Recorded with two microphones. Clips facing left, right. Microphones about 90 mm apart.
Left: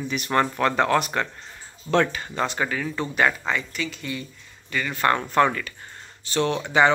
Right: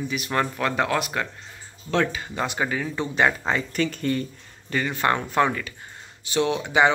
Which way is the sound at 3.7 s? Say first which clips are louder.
Right 6 dB; 45° right (ahead or behind).